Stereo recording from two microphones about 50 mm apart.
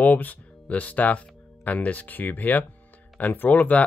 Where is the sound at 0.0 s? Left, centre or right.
Left.